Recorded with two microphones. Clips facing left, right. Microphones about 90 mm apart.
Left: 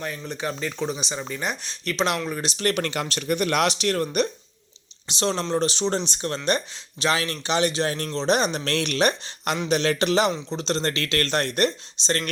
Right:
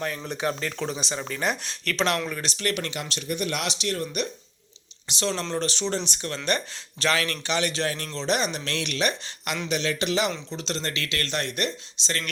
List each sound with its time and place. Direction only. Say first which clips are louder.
0.3 s speech: left 1 dB; centre (ahead or behind); by 2.6 s 15° left (ahead or behind)
2.6 s speech: left 4 dB; 35° left (ahead or behind)
2.8 s speech: left 5 dB; 50° left (ahead or behind)
5.0 s a man's voice: left 3 dB; 30° left (ahead or behind)
7.9 s speech: left 4 dB; 35° left (ahead or behind)